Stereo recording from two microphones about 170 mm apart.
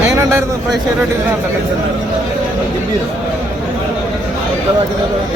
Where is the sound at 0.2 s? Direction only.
15° right (ahead or behind).